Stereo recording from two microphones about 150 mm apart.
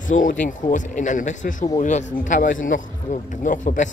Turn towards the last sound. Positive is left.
turn(degrees=55)  # may be behind; listen again after turning